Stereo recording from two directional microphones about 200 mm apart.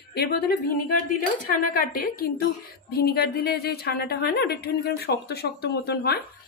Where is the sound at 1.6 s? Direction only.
45° left (ahead or behind).